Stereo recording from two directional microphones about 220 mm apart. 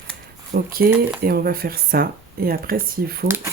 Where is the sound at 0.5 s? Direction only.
40° right (ahead or behind).